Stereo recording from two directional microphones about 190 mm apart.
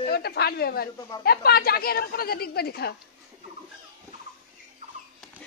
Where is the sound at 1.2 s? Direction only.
55° left (ahead or behind).